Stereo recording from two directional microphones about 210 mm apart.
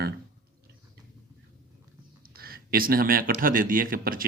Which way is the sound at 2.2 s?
45° right (ahead or behind).